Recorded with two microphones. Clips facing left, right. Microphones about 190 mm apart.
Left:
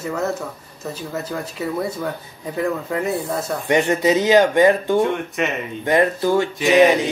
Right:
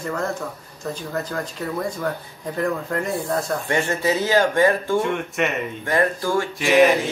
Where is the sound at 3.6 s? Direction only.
20° left (ahead or behind).